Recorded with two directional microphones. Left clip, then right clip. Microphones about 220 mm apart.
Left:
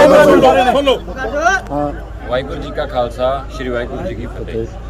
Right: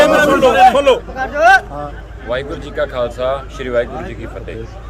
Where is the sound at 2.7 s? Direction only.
10° right (ahead or behind).